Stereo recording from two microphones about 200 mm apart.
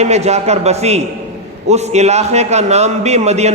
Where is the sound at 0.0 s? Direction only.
35° right (ahead or behind).